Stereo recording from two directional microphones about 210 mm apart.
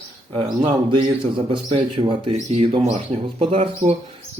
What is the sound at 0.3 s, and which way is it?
A man's voice, 20° right (ahead or behind).